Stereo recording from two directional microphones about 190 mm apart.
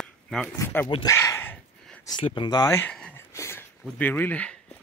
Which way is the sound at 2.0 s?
25° left (ahead or behind).